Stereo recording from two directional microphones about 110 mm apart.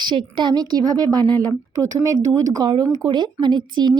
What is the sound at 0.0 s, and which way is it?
A woman's voice, 45° right (ahead or behind).